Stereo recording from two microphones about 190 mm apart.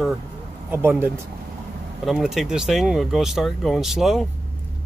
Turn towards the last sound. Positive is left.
turn(degrees=0)  # may be behind; listen again after turning